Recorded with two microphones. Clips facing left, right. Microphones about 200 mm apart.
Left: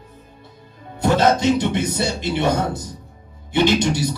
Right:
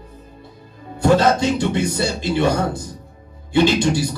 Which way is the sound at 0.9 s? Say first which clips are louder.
Right 2 dB; 20° left (ahead or behind).